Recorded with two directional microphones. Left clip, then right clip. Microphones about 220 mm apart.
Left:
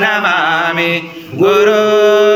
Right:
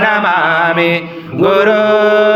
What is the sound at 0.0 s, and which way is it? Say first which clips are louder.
Chant: right 1 dB; 35° right (ahead or behind).